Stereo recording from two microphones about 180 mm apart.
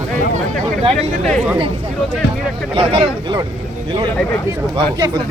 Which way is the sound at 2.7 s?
30° right (ahead or behind).